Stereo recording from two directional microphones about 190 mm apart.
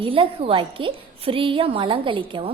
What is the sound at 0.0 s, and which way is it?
A woman's voice, 30° right (ahead or behind).